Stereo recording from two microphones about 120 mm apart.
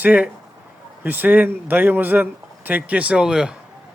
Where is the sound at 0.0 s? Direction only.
15° right (ahead or behind).